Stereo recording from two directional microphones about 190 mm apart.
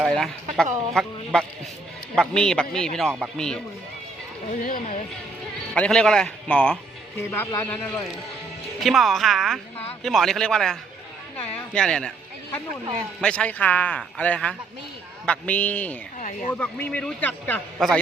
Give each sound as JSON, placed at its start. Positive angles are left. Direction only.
{"t": 0.0, "sound": "speech", "side_deg": 5}
{"t": 4.6, "sound": "speech", "side_deg": 50}
{"t": 5.7, "sound": "a man's voice", "side_deg": 5}
{"t": 8.8, "sound": "speech", "side_deg": 0}
{"t": 13.2, "sound": "a man's voice", "side_deg": 5}